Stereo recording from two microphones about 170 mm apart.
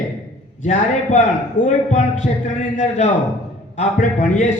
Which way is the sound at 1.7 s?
45° left (ahead or behind).